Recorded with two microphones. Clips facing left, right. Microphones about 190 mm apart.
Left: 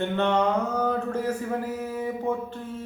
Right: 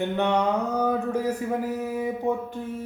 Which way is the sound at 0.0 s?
10° right (ahead or behind).